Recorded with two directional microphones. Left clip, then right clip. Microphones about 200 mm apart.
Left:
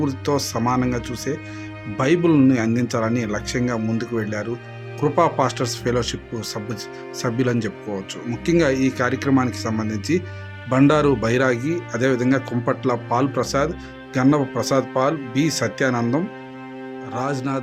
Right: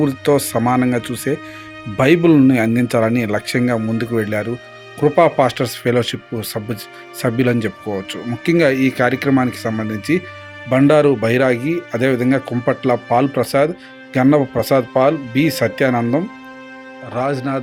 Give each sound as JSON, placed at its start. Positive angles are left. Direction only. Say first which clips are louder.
{"t": 0.3, "sound": "speech", "louder": "right 6 dB", "side_deg": -20}